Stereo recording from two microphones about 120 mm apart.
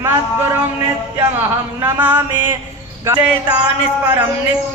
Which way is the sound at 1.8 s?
15° right (ahead or behind).